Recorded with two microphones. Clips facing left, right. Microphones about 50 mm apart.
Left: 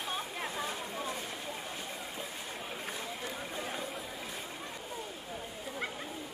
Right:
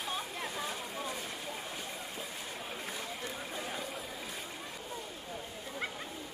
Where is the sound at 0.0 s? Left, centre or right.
Centre.